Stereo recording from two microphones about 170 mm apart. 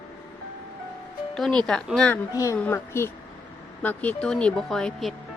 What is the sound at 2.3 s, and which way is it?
A child's voice, 20° left (ahead or behind).